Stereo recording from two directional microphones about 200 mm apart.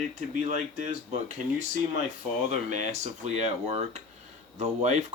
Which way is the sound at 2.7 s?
35° right (ahead or behind).